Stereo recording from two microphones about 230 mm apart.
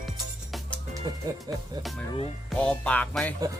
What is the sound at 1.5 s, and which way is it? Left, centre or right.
Speech, centre.